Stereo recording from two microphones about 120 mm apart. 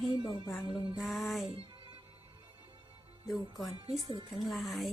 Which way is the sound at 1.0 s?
Centre (ahead or behind).